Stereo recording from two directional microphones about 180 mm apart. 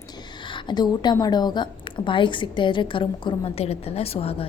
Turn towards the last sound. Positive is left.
turn(degrees=35)  # may be behind; listen again after turning